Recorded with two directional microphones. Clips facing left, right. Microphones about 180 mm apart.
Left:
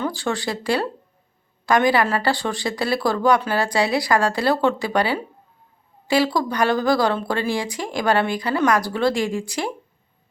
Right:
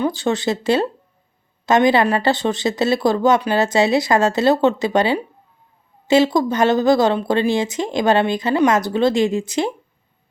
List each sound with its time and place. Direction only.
0.0 s speech: 20° right (ahead or behind)